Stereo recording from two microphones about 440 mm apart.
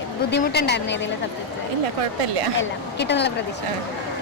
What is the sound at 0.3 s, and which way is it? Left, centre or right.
Speech, left.